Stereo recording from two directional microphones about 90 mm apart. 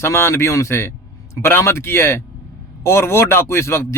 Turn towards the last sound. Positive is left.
turn(degrees=30)  # may be behind; listen again after turning